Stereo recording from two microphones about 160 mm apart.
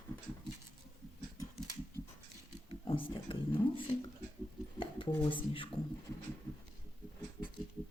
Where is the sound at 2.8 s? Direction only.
35° left (ahead or behind).